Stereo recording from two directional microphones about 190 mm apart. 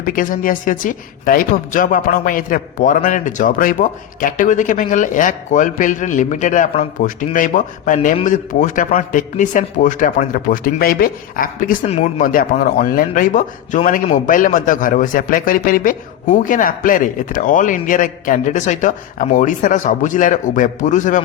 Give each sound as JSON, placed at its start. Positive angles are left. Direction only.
{"t": 0.0, "sound": "speech", "side_deg": 45}
{"t": 11.9, "sound": "speech", "side_deg": 35}
{"t": 12.2, "sound": "speech", "side_deg": 45}